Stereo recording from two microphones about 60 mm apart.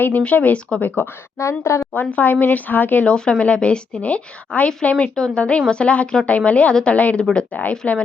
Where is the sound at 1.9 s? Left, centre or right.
Left.